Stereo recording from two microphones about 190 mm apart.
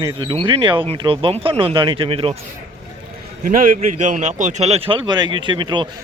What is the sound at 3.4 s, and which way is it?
Speech, 45° right (ahead or behind).